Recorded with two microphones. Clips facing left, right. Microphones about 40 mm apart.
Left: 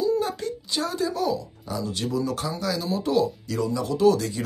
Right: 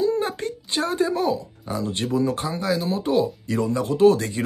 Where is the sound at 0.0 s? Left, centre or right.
Right.